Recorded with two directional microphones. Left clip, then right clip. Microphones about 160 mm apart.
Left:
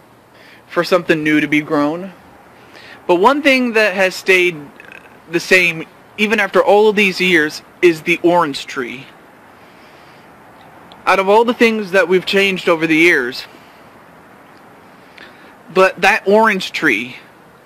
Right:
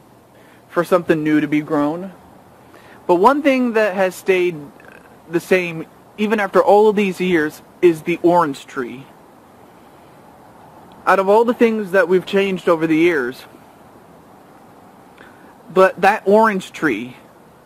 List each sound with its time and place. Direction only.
0.7 s a man's voice: 5° left (ahead or behind)
1.7 s speech: 20° left (ahead or behind)
2.9 s a man's voice: 5° left (ahead or behind)
11.1 s speech: 10° left (ahead or behind)
15.7 s a man's voice: 5° left (ahead or behind)